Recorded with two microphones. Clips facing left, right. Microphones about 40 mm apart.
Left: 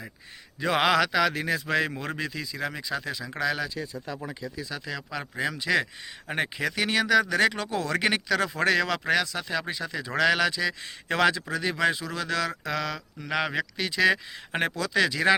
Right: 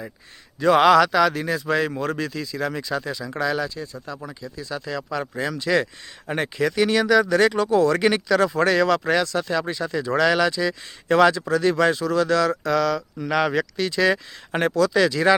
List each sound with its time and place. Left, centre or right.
0.6 s a man's voice: centre
1.4 s speech: left
3.4 s speech: left
3.8 s speech: centre
4.4 s speech: left
11.5 s speech: centre
13.3 s a man's voice: centre
13.7 s speech: left